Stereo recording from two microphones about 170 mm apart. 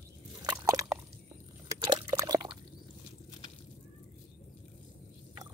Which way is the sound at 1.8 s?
25° right (ahead or behind).